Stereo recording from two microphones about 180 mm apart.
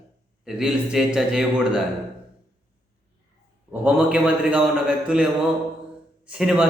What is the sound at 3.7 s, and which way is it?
A man's voice, 10° right (ahead or behind).